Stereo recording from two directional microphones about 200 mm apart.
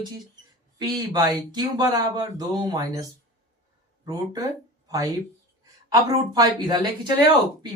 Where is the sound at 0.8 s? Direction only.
20° right (ahead or behind).